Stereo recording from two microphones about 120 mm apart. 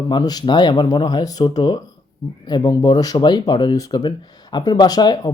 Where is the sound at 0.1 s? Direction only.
35° left (ahead or behind).